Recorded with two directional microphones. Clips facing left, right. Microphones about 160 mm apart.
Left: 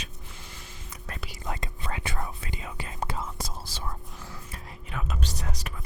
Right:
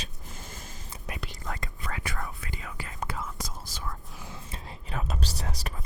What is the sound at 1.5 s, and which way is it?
Whispering, 20° left (ahead or behind).